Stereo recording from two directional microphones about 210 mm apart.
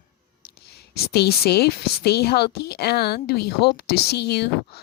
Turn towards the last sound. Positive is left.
turn(degrees=50)  # may be behind; listen again after turning